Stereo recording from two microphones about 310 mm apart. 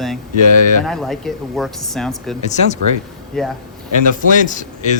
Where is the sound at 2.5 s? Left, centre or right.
Left.